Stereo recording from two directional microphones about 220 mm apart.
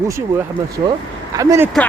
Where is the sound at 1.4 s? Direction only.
15° right (ahead or behind).